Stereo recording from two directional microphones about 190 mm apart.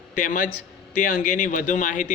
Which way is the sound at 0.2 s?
45° left (ahead or behind).